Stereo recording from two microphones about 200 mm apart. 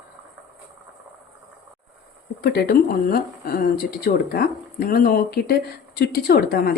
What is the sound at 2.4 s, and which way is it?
A woman's voice, 50° left (ahead or behind).